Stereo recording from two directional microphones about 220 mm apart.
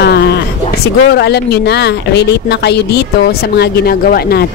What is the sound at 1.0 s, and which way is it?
Speech, 50° left (ahead or behind).